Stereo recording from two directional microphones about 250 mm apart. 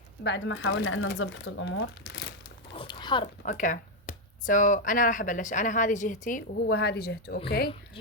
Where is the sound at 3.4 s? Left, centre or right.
Left.